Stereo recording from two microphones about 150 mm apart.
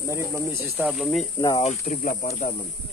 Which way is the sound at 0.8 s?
Centre (ahead or behind).